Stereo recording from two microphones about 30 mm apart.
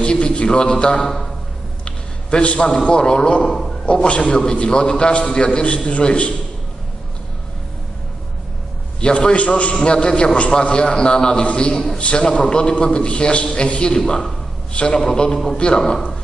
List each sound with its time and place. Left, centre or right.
0.0 s a man's voice: left
1.0 s a man's voice: centre
1.9 s a sound: left
2.9 s a man's voice: left
3.4 s a sound: centre
3.8 s a man's voice: left
9.0 s a man's voice: left
9.8 s a man's voice: left
14.7 s a man's voice: left
15.1 s a man's voice: left
15.5 s a man's voice: left